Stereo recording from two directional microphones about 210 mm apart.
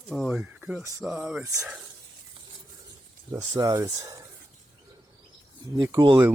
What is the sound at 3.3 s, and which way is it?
Speech, 15° right (ahead or behind).